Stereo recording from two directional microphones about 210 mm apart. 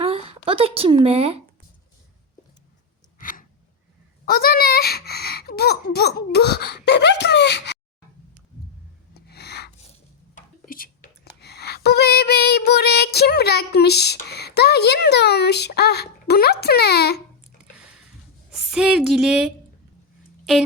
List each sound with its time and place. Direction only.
0.0 s speech: 25° right (ahead or behind)
3.2 s a sound: 40° left (ahead or behind)
4.3 s speech: 45° left (ahead or behind)
9.1 s rub: 50° left (ahead or behind)
10.3 s speech: 40° left (ahead or behind)
17.7 s a sound: 5° right (ahead or behind)
20.4 s speech: centre (ahead or behind)